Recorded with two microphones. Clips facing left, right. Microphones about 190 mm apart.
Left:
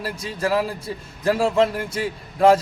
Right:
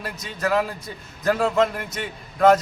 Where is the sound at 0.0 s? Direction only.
30° left (ahead or behind).